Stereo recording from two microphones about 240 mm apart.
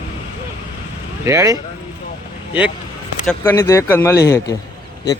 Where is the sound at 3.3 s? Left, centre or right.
Centre.